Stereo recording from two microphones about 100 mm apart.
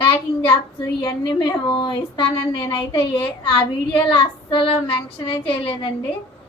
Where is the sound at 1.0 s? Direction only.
45° left (ahead or behind).